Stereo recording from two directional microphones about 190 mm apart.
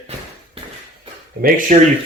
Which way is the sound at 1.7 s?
45° right (ahead or behind).